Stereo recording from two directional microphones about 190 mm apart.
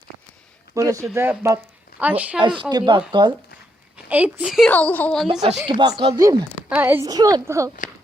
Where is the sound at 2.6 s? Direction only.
25° right (ahead or behind).